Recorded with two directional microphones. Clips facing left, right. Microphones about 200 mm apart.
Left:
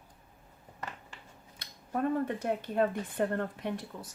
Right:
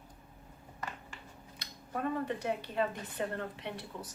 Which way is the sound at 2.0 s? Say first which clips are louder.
Left 4 dB; 50° left (ahead or behind).